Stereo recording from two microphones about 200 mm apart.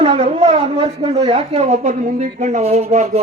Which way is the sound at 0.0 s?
30° right (ahead or behind).